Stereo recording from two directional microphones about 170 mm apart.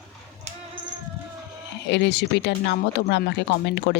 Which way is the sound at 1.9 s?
90° left.